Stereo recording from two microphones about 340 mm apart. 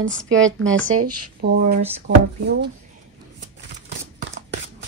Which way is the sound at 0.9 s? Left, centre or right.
Right.